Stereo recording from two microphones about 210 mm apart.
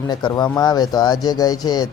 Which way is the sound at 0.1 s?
20° left (ahead or behind).